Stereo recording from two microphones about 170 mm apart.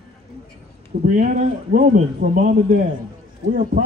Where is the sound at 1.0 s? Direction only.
50° right (ahead or behind).